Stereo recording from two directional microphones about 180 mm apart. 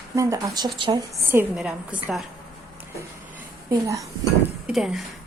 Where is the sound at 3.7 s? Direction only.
15° right (ahead or behind).